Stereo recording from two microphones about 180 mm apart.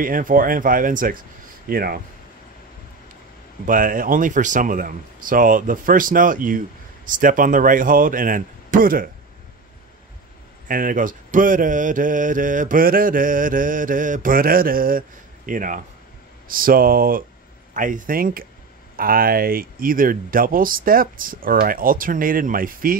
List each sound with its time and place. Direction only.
0.0 s mantra: 50° right (ahead or behind)
1.7 s speech: 55° right (ahead or behind)
3.6 s mantra: 50° right (ahead or behind)
10.7 s mantra: 50° right (ahead or behind)